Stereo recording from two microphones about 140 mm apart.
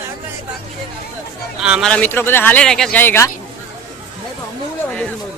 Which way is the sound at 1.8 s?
10° left (ahead or behind).